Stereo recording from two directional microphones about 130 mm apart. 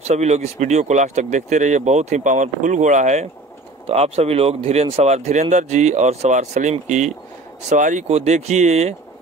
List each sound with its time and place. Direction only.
0.0 s speech: 60° right (ahead or behind)
3.8 s speech: 55° right (ahead or behind)